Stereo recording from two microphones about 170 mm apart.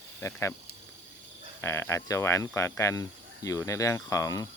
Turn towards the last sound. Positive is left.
turn(degrees=20)  # may be behind; listen again after turning